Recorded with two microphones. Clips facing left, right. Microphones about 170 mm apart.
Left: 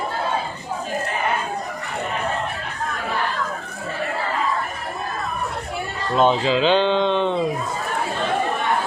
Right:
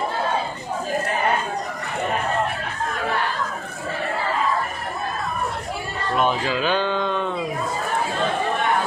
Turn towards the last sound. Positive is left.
turn(degrees=25)  # may be behind; listen again after turning